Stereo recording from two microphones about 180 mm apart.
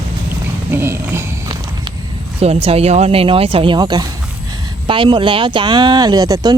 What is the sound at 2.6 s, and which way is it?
A woman's voice, 35° right (ahead or behind).